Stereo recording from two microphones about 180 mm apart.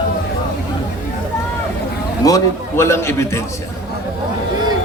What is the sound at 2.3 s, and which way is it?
A man's voice, 15° left (ahead or behind).